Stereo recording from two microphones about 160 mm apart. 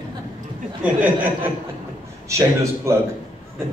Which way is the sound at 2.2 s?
20° right (ahead or behind).